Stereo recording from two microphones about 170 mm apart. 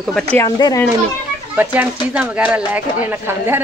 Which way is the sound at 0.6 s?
25° left (ahead or behind).